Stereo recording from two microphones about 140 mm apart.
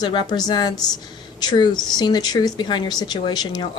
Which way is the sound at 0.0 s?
30° left (ahead or behind).